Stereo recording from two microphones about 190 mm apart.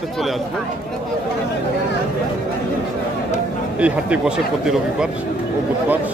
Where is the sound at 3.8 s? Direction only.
5° right (ahead or behind).